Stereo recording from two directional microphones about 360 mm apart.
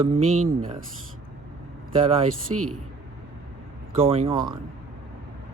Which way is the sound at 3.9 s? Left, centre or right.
Centre.